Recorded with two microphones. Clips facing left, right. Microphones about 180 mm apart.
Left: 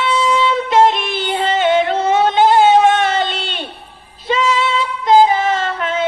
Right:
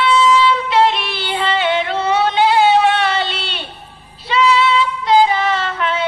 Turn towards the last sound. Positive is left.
turn(degrees=45)  # may be behind; listen again after turning